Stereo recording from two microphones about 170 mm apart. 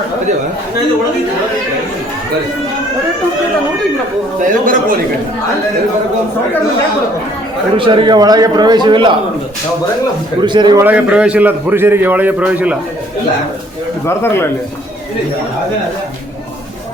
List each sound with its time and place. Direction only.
4.6 s a man's voice: 55° right (ahead or behind)
7.8 s a man's voice: 30° right (ahead or behind)
10.4 s a man's voice: 25° right (ahead or behind)
10.8 s a man's voice: 5° right (ahead or behind)
14.0 s speech: 15° left (ahead or behind)